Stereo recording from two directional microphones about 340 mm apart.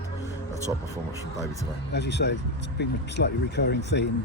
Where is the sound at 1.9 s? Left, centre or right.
Left.